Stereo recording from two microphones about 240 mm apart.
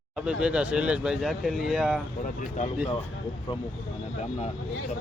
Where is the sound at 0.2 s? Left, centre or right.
Centre.